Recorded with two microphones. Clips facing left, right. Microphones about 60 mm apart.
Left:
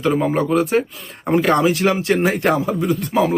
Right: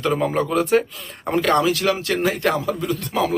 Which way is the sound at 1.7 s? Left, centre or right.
Left.